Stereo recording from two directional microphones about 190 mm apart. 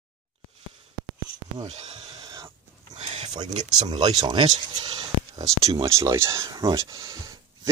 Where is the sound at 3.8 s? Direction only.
25° right (ahead or behind).